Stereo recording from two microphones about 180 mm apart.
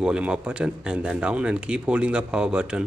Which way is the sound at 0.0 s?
5° right (ahead or behind).